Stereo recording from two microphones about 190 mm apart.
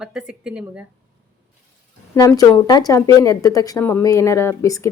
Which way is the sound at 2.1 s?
15° left (ahead or behind).